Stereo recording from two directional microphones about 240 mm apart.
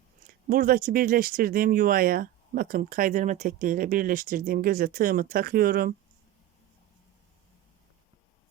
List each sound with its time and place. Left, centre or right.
0.3 s speech: right